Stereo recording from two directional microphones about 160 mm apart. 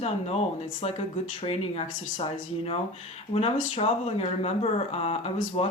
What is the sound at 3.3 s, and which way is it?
Speech, 40° left (ahead or behind).